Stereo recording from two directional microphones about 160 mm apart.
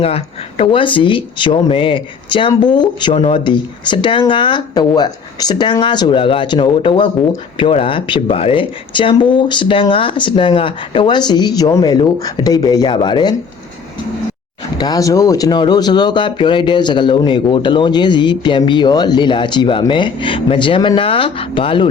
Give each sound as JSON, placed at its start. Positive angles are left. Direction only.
{"t": 0.0, "sound": "speech", "side_deg": 35}
{"t": 14.8, "sound": "speech", "side_deg": 25}